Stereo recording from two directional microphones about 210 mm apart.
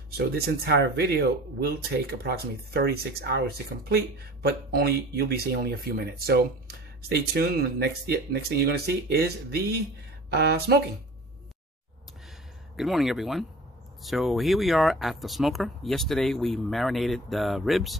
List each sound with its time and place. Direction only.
0.5 s speech: 50° right (ahead or behind)
12.7 s speech: centre (ahead or behind)